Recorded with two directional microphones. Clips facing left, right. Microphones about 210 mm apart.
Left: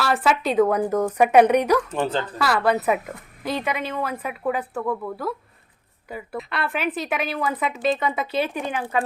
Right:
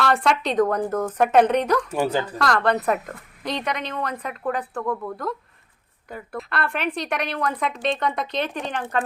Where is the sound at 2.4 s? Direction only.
5° left (ahead or behind).